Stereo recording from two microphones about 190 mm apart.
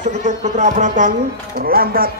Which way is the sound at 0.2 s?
40° right (ahead or behind).